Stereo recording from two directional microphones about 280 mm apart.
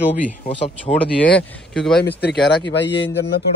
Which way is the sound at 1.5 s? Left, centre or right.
Centre.